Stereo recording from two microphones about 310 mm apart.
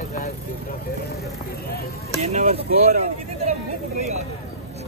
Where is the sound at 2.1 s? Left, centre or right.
Right.